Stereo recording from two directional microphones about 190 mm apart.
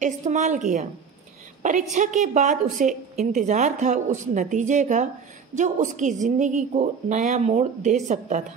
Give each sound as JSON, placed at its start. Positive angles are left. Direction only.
{"t": 0.0, "sound": "a woman's voice", "side_deg": -40}